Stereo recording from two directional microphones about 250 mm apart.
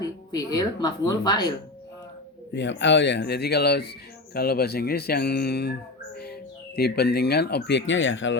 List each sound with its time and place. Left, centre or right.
0.0 s speech: centre
2.5 s speech: left
6.7 s speech: left